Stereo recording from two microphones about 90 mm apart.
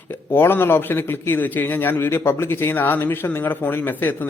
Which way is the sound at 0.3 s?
25° left (ahead or behind).